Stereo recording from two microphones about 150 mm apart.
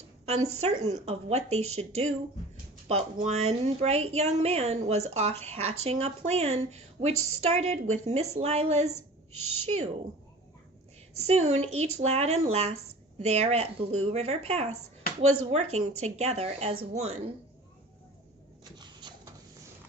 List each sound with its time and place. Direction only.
0.3 s a woman's voice: 45° right (ahead or behind)
11.2 s a woman's voice: 45° right (ahead or behind)
18.8 s a sound: 30° right (ahead or behind)